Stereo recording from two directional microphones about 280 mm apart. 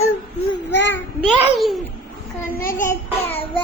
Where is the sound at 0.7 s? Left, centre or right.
Left.